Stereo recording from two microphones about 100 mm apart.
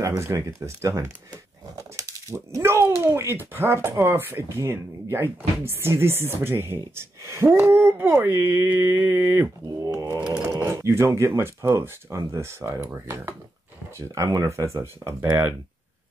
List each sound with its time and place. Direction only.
0.0 s speech: 30° right (ahead or behind)
2.5 s speech: 25° right (ahead or behind)
9.9 s computer keyboard: 25° right (ahead or behind)
10.5 s speech: 30° right (ahead or behind)